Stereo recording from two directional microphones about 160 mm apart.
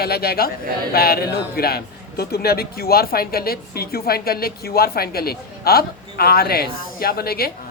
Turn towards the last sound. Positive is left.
turn(degrees=70)  # may be behind; listen again after turning